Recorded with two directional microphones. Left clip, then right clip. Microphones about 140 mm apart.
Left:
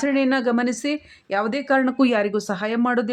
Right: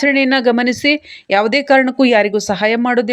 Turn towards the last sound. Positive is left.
turn(degrees=-15)  # may be behind; listen again after turning